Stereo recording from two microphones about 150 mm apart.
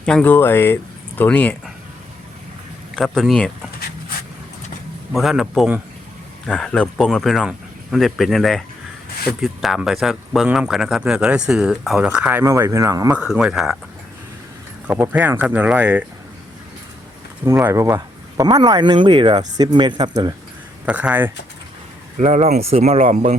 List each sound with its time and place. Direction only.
0.0 s speech: 5° left (ahead or behind)
2.9 s speech: centre (ahead or behind)
5.1 s speech: centre (ahead or behind)
6.5 s speech: 5° left (ahead or behind); by 13.1 s 25° right (ahead or behind)
13.1 s speech: 5° right (ahead or behind)
14.8 s speech: 10° right (ahead or behind)
17.4 s speech: 15° right (ahead or behind)
20.8 s speech: 10° right (ahead or behind)
22.2 s speech: 50° right (ahead or behind)